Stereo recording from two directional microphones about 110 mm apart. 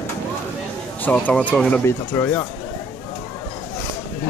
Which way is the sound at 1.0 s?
10° left (ahead or behind).